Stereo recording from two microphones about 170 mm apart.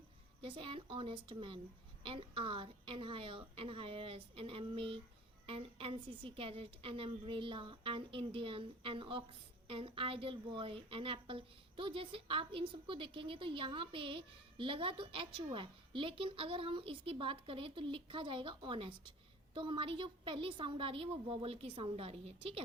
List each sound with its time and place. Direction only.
0.4 s a woman's voice: 30° right (ahead or behind)